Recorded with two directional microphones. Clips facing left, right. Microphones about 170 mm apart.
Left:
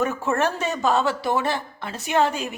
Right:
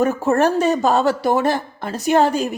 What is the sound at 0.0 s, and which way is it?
Speech, 40° right (ahead or behind).